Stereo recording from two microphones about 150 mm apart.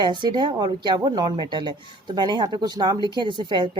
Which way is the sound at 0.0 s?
30° right (ahead or behind).